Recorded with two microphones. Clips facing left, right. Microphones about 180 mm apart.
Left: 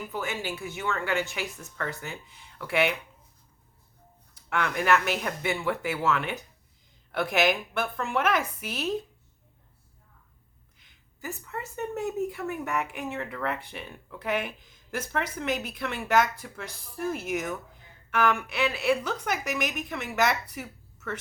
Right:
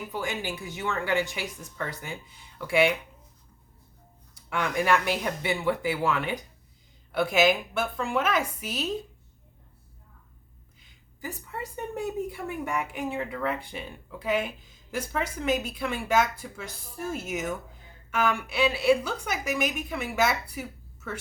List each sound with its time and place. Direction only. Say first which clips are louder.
0.1 s a woman's voice: right 1 dB; 15° right (ahead or behind)
4.4 s a woman's voice: right 1 dB; 15° right (ahead or behind)
11.3 s a woman's voice: even; 10° right (ahead or behind)